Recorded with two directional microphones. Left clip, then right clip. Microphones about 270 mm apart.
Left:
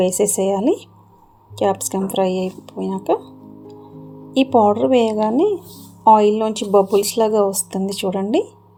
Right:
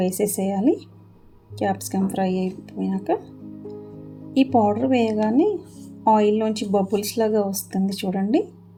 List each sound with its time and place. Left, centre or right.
0.0 s speech: centre
4.4 s speech: centre